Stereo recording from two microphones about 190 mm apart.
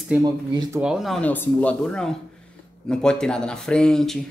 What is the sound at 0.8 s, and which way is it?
Speech, centre (ahead or behind).